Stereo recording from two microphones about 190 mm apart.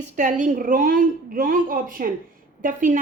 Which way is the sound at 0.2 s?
40° right (ahead or behind).